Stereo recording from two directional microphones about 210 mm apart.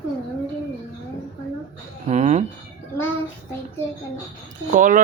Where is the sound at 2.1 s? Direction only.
35° right (ahead or behind).